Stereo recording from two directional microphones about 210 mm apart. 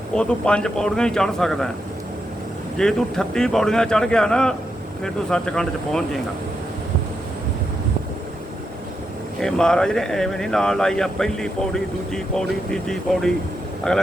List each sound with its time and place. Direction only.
0.1 s speech: 5° left (ahead or behind)
2.7 s speech: 5° left (ahead or behind)
9.4 s speech: 5° left (ahead or behind)